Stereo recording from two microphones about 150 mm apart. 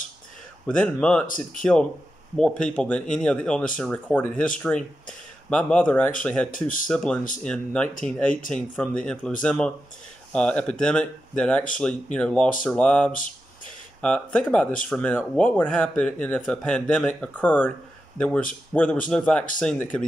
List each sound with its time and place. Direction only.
0.7 s speech: 10° left (ahead or behind)
1.2 s speech: 65° left (ahead or behind)
1.6 s speech: 5° left (ahead or behind)